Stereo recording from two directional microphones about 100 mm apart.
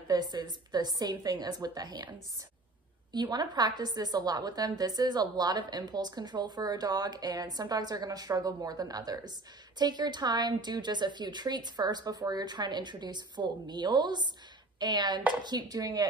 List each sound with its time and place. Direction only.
0.1 s a woman's voice: 45° right (ahead or behind)
3.1 s a woman's voice: 45° right (ahead or behind)